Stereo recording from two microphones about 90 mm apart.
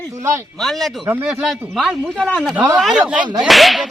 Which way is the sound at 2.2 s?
15° left (ahead or behind).